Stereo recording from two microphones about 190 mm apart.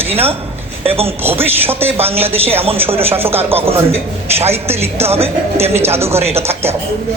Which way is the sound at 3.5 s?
30° right (ahead or behind).